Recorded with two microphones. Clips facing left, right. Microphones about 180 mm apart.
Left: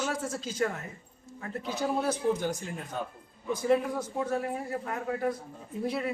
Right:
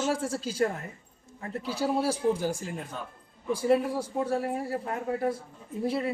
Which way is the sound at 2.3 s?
35° right (ahead or behind).